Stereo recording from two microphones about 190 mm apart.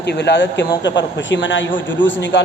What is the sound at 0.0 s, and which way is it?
A man's voice, 65° left (ahead or behind).